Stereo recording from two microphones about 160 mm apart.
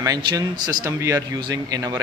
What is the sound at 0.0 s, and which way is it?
Speech, 25° right (ahead or behind).